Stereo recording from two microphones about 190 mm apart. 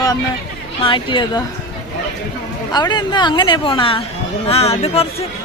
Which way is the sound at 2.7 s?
20° left (ahead or behind).